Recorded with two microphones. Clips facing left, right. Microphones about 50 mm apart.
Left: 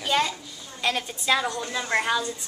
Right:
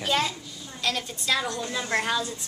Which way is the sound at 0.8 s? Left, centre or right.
Centre.